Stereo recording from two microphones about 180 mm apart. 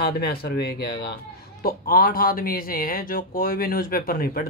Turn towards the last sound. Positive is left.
turn(degrees=50)  # may be behind; listen again after turning